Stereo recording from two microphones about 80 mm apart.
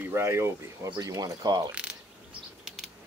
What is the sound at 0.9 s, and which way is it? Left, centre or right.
Speech, right.